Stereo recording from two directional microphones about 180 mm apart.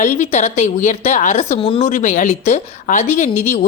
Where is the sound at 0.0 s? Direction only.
40° left (ahead or behind).